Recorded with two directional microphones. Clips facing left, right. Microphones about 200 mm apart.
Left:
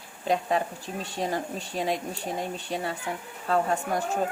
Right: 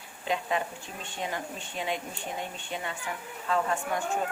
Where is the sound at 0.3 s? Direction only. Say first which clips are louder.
Left 4 dB; 40° left (ahead or behind).